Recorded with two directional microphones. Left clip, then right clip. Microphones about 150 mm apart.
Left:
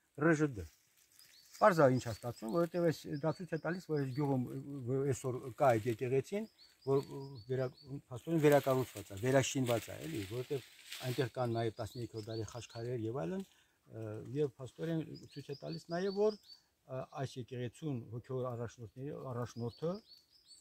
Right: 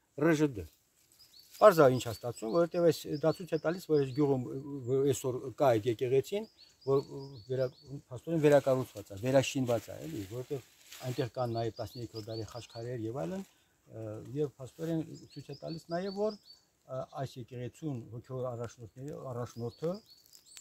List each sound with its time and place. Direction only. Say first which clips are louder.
0.2 s speech: right 3 dB; 90° right
1.6 s speech: right 6 dB; 90° right; by 6.9 s 55° right (ahead or behind)
6.9 s speech: right 4 dB; 35° right (ahead or behind)
8.1 s speech: right 4 dB; 20° right (ahead or behind)
9.8 s speech: right 2 dB; centre (ahead or behind)